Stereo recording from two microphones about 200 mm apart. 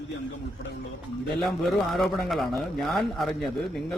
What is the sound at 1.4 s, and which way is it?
A man's voice, centre (ahead or behind).